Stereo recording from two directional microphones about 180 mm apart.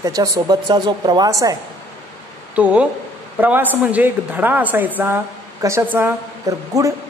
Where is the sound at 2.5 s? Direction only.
5° right (ahead or behind).